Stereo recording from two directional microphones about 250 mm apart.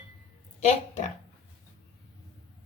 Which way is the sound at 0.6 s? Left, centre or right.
Left.